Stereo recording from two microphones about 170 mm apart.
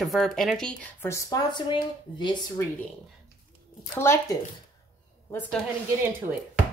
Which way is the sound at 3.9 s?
15° left (ahead or behind).